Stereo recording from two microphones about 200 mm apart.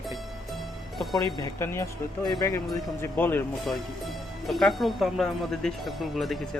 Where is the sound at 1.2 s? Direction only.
15° left (ahead or behind); by 6.4 s centre (ahead or behind).